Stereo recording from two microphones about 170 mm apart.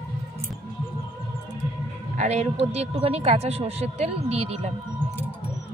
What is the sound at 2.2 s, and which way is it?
A woman's voice, 40° right (ahead or behind).